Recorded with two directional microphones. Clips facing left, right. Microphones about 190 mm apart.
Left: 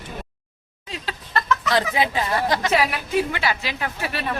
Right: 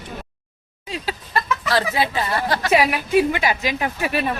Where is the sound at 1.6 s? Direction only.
20° left (ahead or behind).